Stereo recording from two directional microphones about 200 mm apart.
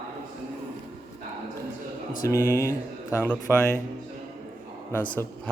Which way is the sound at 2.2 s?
15° left (ahead or behind).